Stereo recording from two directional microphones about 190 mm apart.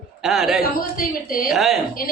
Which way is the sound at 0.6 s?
50° left (ahead or behind).